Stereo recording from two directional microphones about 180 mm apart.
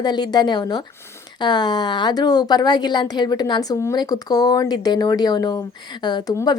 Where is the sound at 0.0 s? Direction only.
25° left (ahead or behind).